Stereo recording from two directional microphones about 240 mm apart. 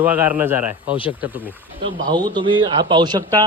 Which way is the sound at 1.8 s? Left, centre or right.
Centre.